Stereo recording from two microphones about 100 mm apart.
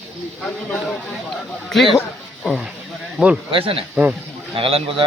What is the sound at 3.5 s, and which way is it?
Speech, 65° right (ahead or behind).